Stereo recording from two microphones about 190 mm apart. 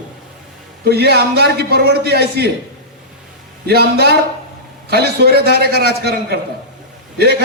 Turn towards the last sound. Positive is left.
turn(degrees=-60)  # may be behind; listen again after turning